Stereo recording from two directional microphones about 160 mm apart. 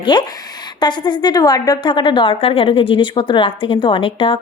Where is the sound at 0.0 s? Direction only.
30° left (ahead or behind).